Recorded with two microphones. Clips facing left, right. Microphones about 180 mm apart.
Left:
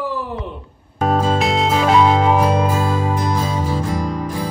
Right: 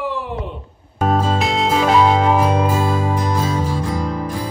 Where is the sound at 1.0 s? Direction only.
Centre (ahead or behind).